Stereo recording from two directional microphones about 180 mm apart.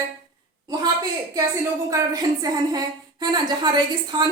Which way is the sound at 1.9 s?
20° right (ahead or behind).